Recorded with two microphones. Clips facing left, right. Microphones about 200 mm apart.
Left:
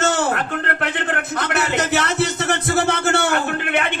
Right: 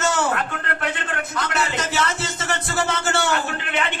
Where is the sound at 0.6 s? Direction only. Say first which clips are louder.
Left 4 dB; 65° left (ahead or behind).